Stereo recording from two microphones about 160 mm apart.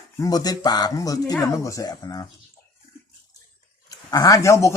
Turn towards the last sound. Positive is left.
turn(degrees=20)  # may be behind; listen again after turning